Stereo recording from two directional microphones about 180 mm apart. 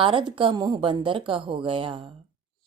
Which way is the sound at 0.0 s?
30° right (ahead or behind).